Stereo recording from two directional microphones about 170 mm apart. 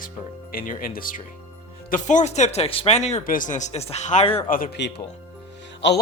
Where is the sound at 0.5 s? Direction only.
55° left (ahead or behind); by 4.5 s 35° left (ahead or behind).